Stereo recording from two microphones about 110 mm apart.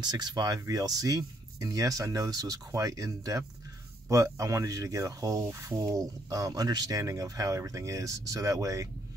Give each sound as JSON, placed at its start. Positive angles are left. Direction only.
{"t": 0.0, "sound": "speech", "side_deg": -40}